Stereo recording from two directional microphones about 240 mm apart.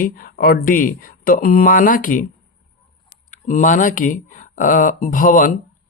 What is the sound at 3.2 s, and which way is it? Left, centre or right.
A woman's voice, left.